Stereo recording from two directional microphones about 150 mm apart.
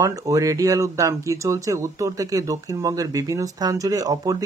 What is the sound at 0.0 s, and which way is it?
Speech, 25° right (ahead or behind).